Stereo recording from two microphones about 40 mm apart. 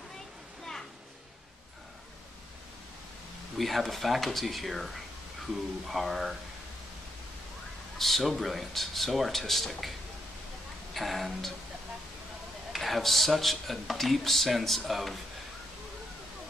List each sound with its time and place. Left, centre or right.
3.5 s speech: centre
8.0 s speech: centre
11.0 s speech: centre
12.7 s speech: centre